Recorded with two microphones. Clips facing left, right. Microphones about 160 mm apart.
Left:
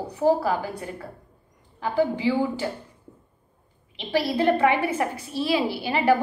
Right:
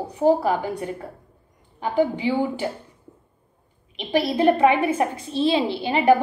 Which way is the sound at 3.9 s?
15° right (ahead or behind).